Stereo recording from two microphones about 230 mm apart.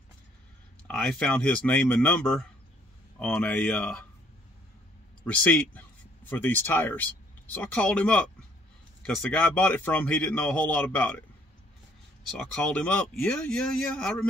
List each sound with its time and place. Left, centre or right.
0.8 s speech: centre
5.2 s a man's voice: centre
12.2 s speech: centre